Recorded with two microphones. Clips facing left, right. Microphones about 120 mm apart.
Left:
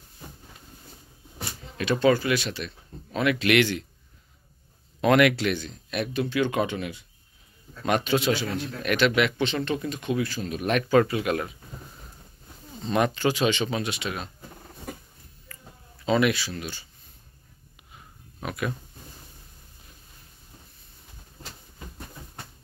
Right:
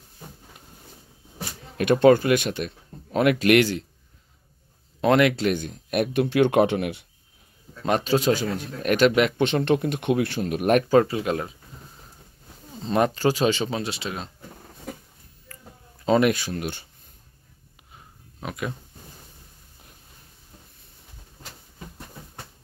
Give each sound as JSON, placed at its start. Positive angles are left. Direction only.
{"t": 1.8, "sound": "speech", "side_deg": -55}
{"t": 5.0, "sound": "speech", "side_deg": -30}
{"t": 5.4, "sound": "speech", "side_deg": -50}
{"t": 7.8, "sound": "speech", "side_deg": -35}
{"t": 10.8, "sound": "speech", "side_deg": -30}
{"t": 12.9, "sound": "speech", "side_deg": -35}
{"t": 15.5, "sound": "a sound", "side_deg": -40}
{"t": 16.1, "sound": "speech", "side_deg": -45}
{"t": 18.4, "sound": "speech", "side_deg": -20}